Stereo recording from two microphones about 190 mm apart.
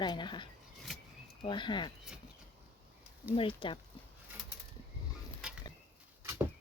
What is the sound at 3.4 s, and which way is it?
Speech, 25° left (ahead or behind).